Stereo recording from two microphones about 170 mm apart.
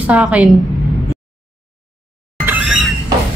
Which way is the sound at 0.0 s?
5° right (ahead or behind).